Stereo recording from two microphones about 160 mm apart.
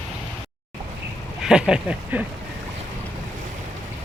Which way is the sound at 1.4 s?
5° right (ahead or behind).